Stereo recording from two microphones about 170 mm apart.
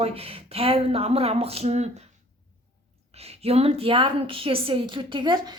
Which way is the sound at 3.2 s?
35° right (ahead or behind).